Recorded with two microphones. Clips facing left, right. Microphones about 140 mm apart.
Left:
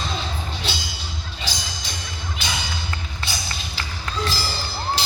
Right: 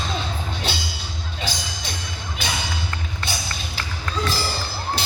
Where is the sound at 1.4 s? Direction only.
55° right (ahead or behind).